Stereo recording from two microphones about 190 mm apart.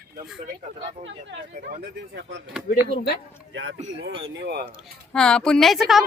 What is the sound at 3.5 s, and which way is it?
Speech, 75° right (ahead or behind).